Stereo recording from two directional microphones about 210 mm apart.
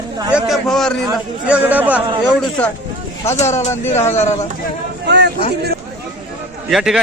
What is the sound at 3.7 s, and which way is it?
Speech, 10° left (ahead or behind).